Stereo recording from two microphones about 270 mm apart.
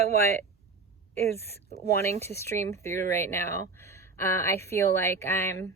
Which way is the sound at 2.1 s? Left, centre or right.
Right.